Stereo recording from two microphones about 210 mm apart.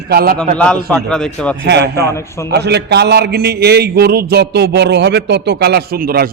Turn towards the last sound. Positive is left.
turn(degrees=-45)  # may be behind; listen again after turning